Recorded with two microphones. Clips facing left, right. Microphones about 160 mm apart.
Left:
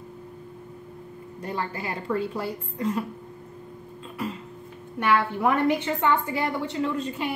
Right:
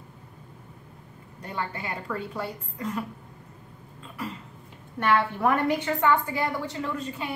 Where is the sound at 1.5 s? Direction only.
30° left (ahead or behind).